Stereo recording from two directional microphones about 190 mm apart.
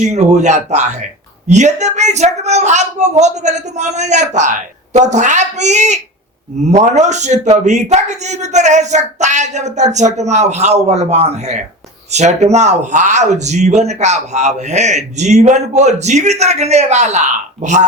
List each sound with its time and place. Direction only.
0.0 s speech: 35° right (ahead or behind)